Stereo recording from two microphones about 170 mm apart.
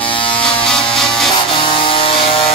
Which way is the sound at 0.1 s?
30° left (ahead or behind).